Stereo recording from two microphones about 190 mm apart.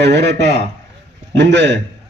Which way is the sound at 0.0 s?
65° right (ahead or behind).